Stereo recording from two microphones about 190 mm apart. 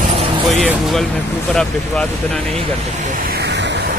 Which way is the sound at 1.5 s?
Centre (ahead or behind).